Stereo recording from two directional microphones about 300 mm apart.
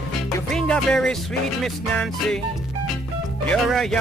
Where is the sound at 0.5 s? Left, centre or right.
Centre.